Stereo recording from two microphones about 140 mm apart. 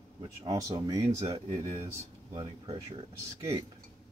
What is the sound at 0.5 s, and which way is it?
Speech, 25° right (ahead or behind).